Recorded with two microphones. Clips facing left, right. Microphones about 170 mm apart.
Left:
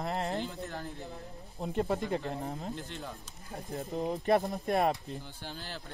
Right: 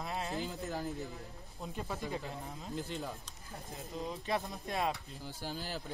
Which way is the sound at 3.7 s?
60° left (ahead or behind).